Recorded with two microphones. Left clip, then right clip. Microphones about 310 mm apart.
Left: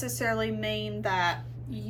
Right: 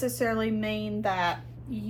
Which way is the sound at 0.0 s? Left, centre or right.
Centre.